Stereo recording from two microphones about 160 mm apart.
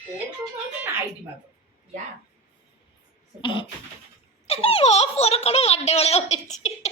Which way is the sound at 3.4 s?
30° left (ahead or behind).